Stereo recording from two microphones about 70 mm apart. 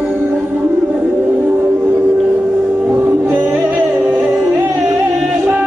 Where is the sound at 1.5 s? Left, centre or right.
Right.